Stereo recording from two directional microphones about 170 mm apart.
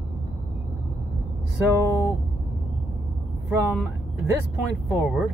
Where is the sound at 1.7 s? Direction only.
15° right (ahead or behind).